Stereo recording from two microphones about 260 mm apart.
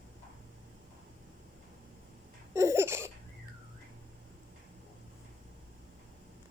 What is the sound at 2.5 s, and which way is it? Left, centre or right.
Laughter, centre.